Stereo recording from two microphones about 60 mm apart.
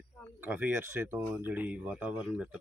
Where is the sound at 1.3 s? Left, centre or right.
Right.